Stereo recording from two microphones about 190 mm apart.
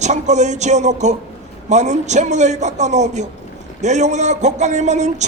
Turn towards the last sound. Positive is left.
turn(degrees=-35)  # may be behind; listen again after turning